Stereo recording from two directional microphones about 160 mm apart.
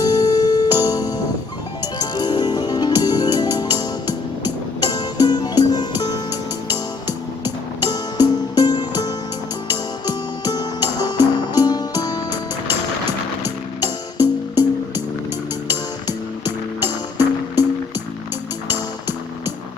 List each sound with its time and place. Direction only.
0.0 s music: 25° left (ahead or behind)
7.9 s music: 25° left (ahead or behind)
10.1 s music: 25° left (ahead or behind)
12.3 s music: 15° right (ahead or behind)
18.7 s music: 15° right (ahead or behind)